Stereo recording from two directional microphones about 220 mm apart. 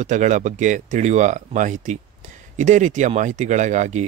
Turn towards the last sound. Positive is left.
turn(degrees=-35)  # may be behind; listen again after turning